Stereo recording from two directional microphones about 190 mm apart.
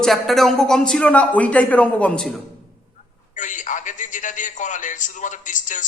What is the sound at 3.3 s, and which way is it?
A man's voice, 40° left (ahead or behind).